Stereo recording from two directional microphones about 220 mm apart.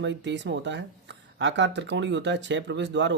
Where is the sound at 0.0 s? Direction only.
55° right (ahead or behind).